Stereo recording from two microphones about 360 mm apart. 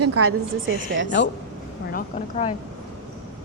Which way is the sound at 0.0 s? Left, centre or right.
Right.